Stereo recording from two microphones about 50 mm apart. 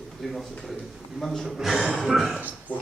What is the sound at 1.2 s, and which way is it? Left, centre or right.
Speech, centre.